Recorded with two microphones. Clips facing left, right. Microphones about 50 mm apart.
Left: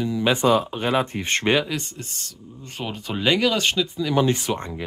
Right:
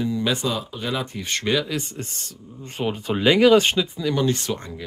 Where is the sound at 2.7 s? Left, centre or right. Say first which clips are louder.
Right 5 dB; centre.